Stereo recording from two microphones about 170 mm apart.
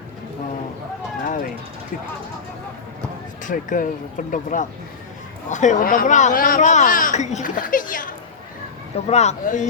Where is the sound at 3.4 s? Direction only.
50° left (ahead or behind).